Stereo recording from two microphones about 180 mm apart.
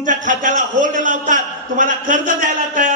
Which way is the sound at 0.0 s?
45° right (ahead or behind).